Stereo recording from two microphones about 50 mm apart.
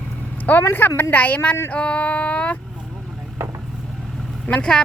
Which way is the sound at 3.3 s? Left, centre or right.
Right.